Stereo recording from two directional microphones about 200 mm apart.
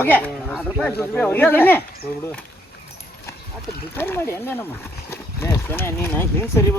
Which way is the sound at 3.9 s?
10° left (ahead or behind).